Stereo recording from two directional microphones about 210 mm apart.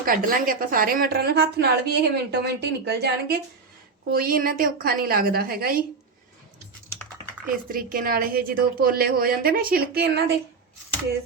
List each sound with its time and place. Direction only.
0.0 s a woman's voice: 45° right (ahead or behind)
7.4 s a woman's voice: 45° right (ahead or behind)